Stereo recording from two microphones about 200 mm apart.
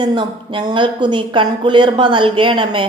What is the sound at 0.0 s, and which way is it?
A woman's voice, 25° right (ahead or behind).